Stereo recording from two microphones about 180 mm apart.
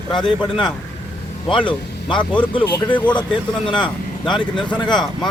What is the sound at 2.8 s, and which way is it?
Speech, 10° left (ahead or behind).